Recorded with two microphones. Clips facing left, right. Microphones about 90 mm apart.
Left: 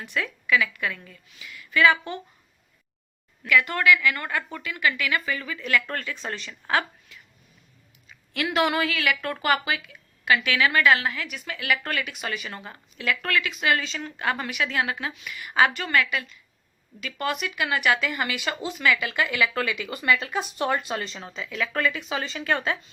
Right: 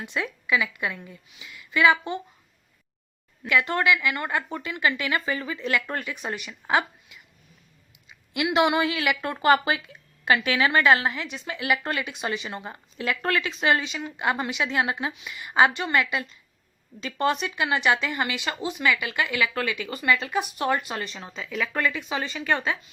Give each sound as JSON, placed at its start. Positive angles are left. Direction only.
{"t": 0.0, "sound": "a woman's voice", "side_deg": -20}
{"t": 3.4, "sound": "a woman's voice", "side_deg": -25}
{"t": 8.3, "sound": "a woman's voice", "side_deg": -15}
{"t": 13.9, "sound": "a woman's voice", "side_deg": -15}